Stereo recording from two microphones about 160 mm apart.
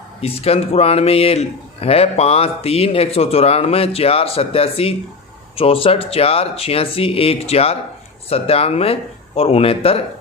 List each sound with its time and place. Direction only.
0.2 s speech: 40° left (ahead or behind)